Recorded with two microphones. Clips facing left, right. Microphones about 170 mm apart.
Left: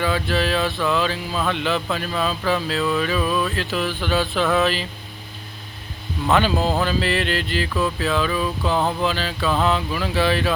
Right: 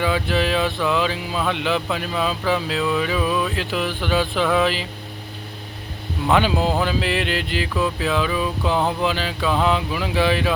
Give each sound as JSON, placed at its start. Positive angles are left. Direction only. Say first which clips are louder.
{"t": 0.0, "sound": "speech", "louder": "right 1 dB", "side_deg": -15}
{"t": 6.2, "sound": "speech", "louder": "even", "side_deg": -15}